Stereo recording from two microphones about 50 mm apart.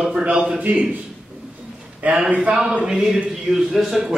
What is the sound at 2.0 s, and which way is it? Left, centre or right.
Speech, right.